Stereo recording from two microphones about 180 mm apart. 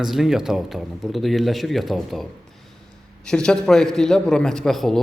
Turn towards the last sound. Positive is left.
turn(degrees=0)  # may be behind; listen again after turning